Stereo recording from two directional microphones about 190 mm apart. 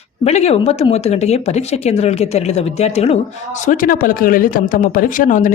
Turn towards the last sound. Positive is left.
turn(degrees=45)  # may be behind; listen again after turning